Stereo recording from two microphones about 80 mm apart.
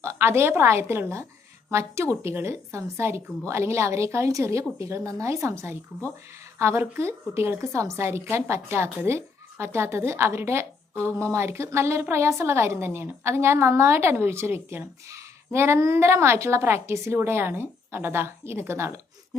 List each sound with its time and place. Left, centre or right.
0.0 s a woman's voice: right